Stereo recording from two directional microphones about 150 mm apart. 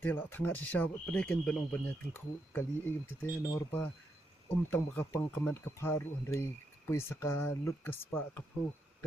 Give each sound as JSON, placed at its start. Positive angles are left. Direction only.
{"t": 0.0, "sound": "speech", "side_deg": 15}